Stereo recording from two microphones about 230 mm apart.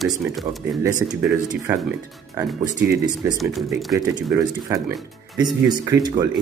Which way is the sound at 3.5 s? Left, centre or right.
Centre.